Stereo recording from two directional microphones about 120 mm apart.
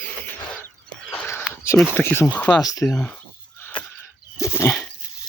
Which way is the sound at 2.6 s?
30° left (ahead or behind).